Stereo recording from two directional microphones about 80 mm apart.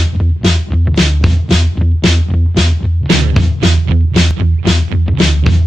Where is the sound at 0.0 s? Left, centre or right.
Centre.